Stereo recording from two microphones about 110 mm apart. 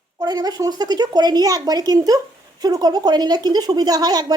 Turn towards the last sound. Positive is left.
turn(degrees=-35)  # may be behind; listen again after turning